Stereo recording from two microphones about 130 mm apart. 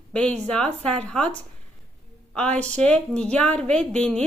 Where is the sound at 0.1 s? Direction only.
10° left (ahead or behind).